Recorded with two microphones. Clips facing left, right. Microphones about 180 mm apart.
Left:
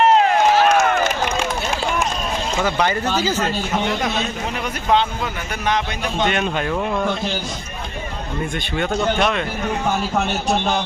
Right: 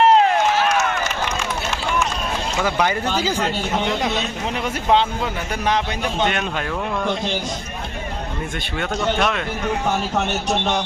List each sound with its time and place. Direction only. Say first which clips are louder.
0.0 s run: even; 30° right (ahead or behind)
0.6 s run: left 4 dB; 40° left (ahead or behind)
2.6 s speech: even; 5° right (ahead or behind)
4.9 s a man's voice: even; 30° right (ahead or behind)
6.1 s speech: left 4 dB; 5° right (ahead or behind)
9.1 s speech: left 1 dB; centre (ahead or behind)